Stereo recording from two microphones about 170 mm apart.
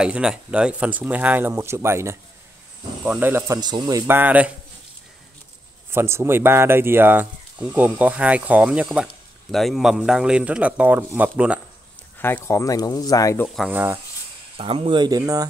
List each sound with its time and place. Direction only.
0.0 s speech: 5° right (ahead or behind); by 4.0 s 25° right (ahead or behind)
4.1 s speech: 10° right (ahead or behind)
5.9 s speech: 15° right (ahead or behind)
12.2 s speech: 10° left (ahead or behind)
13.7 s speech: 10° right (ahead or behind)
14.6 s speech: 35° right (ahead or behind)